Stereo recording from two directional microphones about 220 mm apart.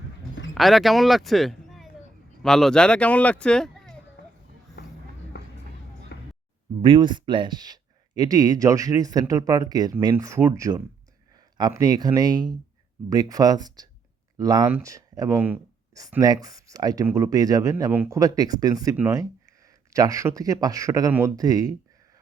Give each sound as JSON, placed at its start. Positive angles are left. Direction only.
{"t": 0.5, "sound": "speech", "side_deg": 0}
{"t": 6.1, "sound": "a sound", "side_deg": 50}
{"t": 6.8, "sound": "speech", "side_deg": -20}